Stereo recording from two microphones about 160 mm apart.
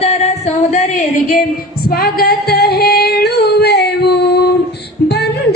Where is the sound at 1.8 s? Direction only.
70° left (ahead or behind); by 4.4 s 90° left.